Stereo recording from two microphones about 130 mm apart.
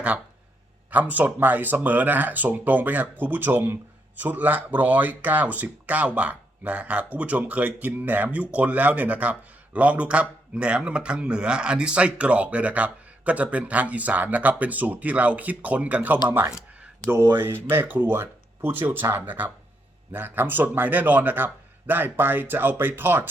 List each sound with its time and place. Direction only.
0.9 s speech: 15° right (ahead or behind)
17.3 s speech: 15° right (ahead or behind)